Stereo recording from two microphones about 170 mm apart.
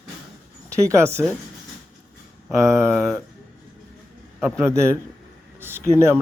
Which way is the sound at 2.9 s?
Centre (ahead or behind).